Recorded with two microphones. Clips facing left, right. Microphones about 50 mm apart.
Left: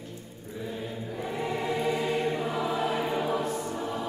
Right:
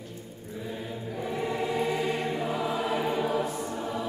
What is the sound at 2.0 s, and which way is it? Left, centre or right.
Choir, centre.